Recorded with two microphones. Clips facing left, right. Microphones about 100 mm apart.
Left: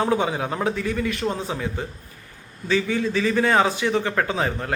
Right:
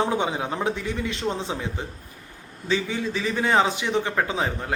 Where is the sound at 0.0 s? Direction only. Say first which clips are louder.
Left 2 dB; 20° right (ahead or behind).